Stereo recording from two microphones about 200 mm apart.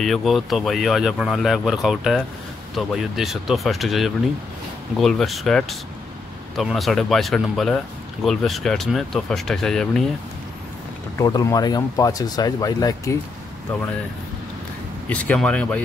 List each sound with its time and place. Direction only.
0.0 s speech: centre (ahead or behind)
11.1 s speech: 15° left (ahead or behind)
15.0 s speech: 5° left (ahead or behind)